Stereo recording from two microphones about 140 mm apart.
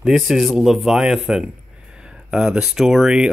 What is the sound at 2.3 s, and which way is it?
Speech, 5° right (ahead or behind).